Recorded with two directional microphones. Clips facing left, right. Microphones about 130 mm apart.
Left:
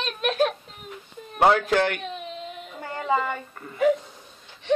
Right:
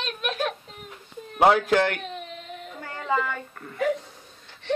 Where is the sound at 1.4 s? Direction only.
5° right (ahead or behind).